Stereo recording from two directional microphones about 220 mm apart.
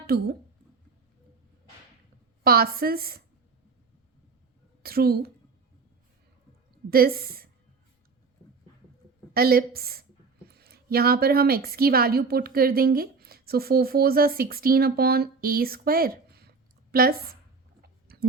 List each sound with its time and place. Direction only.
0.1 s a woman's voice: 45° right (ahead or behind)
2.4 s a woman's voice: 45° right (ahead or behind)
4.8 s a woman's voice: 45° right (ahead or behind)
6.9 s a woman's voice: 45° right (ahead or behind)
9.3 s a woman's voice: 45° right (ahead or behind)
18.1 s a sound: 45° right (ahead or behind)